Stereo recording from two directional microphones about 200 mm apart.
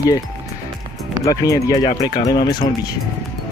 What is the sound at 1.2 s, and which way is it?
Speech, 15° left (ahead or behind).